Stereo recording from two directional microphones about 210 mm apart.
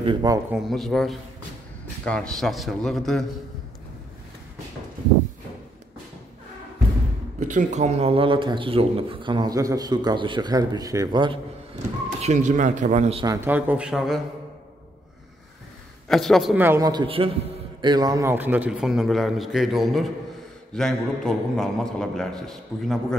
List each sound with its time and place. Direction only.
0.0 s a man's voice: 20° right (ahead or behind)
0.5 s a man's voice: centre (ahead or behind)
7.3 s a man's voice: 35° right (ahead or behind)
12.2 s speech: 35° right (ahead or behind)
13.2 s a man's voice: 15° right (ahead or behind)
16.1 s a man's voice: centre (ahead or behind)